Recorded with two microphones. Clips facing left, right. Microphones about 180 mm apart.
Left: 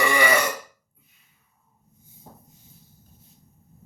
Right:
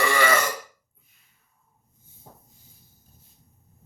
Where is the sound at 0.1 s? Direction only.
15° left (ahead or behind).